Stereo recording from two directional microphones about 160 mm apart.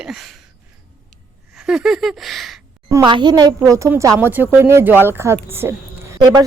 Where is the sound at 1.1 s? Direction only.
5° right (ahead or behind).